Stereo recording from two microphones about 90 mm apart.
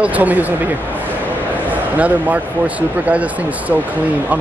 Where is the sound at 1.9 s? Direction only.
15° right (ahead or behind).